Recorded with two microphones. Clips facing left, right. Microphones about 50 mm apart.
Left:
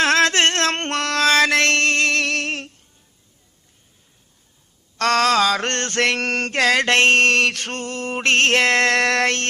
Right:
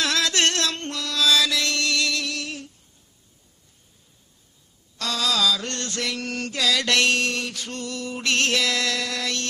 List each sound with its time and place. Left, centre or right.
0.0 s mantra: left
4.9 s mantra: left